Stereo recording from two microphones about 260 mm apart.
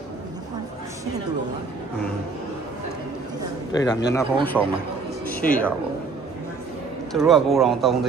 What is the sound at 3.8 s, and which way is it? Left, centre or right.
Speech, centre.